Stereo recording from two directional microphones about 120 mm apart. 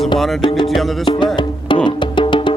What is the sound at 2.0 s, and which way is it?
Music, 40° left (ahead or behind).